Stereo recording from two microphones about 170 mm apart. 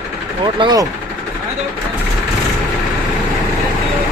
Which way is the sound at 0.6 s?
25° right (ahead or behind).